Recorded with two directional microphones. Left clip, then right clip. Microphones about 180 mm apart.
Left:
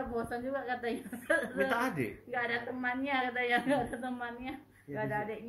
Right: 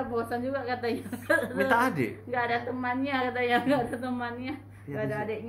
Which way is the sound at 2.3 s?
25° right (ahead or behind).